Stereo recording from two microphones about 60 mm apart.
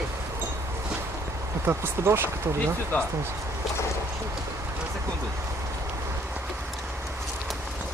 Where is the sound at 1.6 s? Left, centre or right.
Right.